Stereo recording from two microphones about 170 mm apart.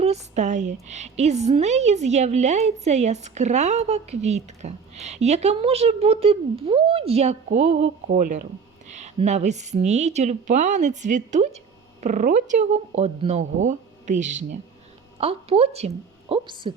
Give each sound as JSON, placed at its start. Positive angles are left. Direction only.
{"t": 0.0, "sound": "a woman's voice", "side_deg": -40}